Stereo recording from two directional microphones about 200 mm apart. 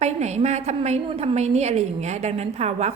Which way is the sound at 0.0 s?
35° right (ahead or behind).